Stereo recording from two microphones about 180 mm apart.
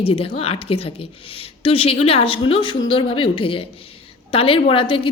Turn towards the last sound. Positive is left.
turn(degrees=30)  # may be behind; listen again after turning